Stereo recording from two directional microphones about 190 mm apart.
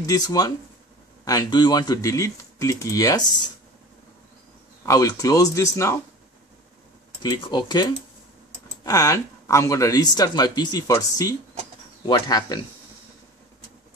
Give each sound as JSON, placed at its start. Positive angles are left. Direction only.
{"t": 0.0, "sound": "speech", "side_deg": 20}
{"t": 4.8, "sound": "speech", "side_deg": 20}
{"t": 7.2, "sound": "speech", "side_deg": 25}